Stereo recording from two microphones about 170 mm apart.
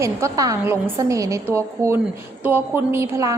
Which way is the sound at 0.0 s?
20° right (ahead or behind).